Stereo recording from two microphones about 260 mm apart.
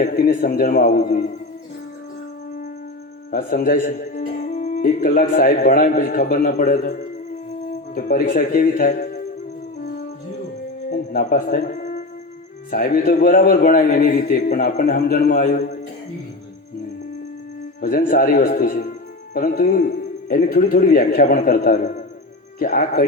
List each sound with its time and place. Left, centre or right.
0.0 s speech: left
3.3 s speech: left
10.9 s speech: left
17.7 s a man's voice: left